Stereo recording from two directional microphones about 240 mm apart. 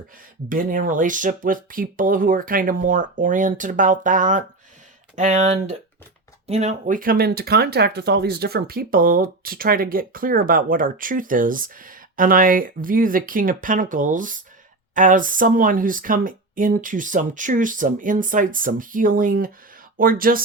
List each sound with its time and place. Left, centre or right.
0.4 s speech: right